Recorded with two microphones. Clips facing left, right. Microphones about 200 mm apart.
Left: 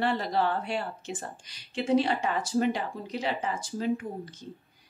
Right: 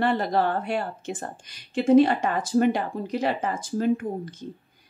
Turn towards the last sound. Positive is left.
turn(degrees=-55)  # may be behind; listen again after turning